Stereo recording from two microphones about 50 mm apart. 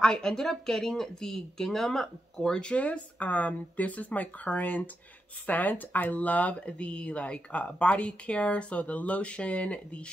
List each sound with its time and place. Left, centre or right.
0.0 s speech: centre
2.6 s speech: left